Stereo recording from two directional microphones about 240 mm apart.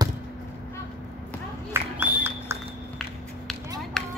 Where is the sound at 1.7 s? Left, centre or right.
Centre.